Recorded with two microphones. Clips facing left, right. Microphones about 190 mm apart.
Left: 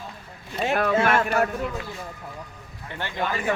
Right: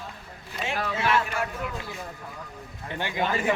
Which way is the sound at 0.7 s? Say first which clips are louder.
Left 5 dB; 55° left (ahead or behind).